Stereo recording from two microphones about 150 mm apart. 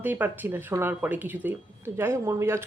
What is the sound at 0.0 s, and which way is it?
Speech, 10° right (ahead or behind).